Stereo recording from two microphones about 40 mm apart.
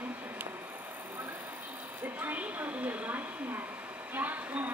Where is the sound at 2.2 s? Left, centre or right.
Right.